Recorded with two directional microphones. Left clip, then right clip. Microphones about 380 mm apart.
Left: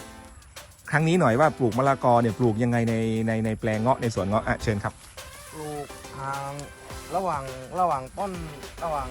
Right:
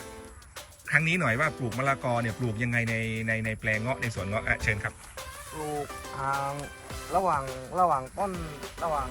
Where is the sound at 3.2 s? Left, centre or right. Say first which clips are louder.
Left 2 dB; left.